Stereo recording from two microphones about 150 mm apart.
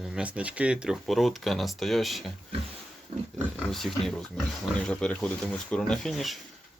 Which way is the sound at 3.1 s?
45° right (ahead or behind).